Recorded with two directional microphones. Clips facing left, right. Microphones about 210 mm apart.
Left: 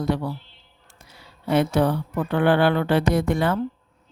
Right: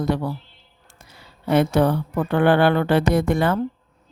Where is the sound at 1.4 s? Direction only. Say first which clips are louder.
Right 2 dB; 50° right (ahead or behind).